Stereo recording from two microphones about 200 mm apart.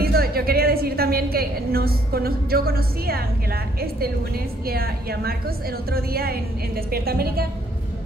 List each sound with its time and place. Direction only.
0.0 s a woman's voice: 50° right (ahead or behind)
4.6 s a woman's voice: 50° right (ahead or behind)